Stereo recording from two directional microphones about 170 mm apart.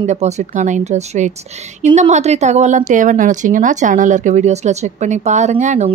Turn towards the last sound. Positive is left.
turn(degrees=-45)  # may be behind; listen again after turning